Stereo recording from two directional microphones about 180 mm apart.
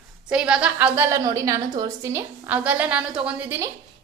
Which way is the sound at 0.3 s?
5° right (ahead or behind).